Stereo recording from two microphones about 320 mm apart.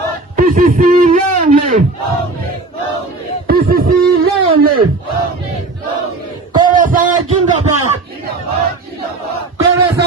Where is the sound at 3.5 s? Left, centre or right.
Right.